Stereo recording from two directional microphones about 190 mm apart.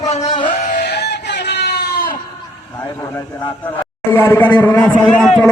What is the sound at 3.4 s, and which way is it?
A man's voice, 15° left (ahead or behind).